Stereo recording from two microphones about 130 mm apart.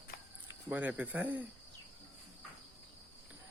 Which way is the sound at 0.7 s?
10° right (ahead or behind).